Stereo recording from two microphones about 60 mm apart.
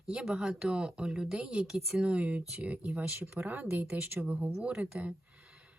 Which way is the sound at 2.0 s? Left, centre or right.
Right.